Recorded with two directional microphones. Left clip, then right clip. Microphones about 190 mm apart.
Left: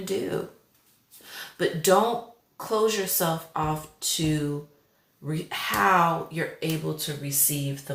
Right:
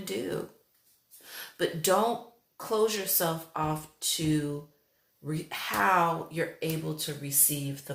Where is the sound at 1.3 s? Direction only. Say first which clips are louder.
Left 4 dB; 35° right (ahead or behind).